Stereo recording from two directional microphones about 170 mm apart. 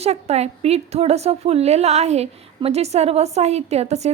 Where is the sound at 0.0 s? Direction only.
40° right (ahead or behind).